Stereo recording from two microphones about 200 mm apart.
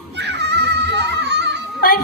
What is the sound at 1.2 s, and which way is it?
Children playing, 55° right (ahead or behind).